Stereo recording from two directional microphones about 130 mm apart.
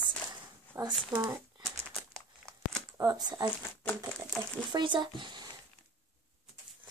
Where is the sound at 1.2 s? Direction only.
25° right (ahead or behind).